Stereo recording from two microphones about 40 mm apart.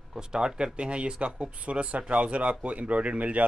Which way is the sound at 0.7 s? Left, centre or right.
Right.